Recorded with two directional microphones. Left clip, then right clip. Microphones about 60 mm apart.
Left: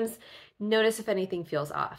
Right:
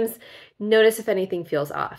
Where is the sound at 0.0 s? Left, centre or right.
Right.